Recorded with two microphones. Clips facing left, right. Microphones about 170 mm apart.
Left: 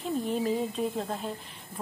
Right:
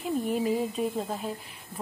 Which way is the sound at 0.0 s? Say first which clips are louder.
Right 1 dB; 10° right (ahead or behind).